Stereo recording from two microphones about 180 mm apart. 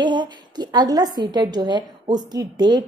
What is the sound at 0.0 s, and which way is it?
A woman's voice, 25° right (ahead or behind).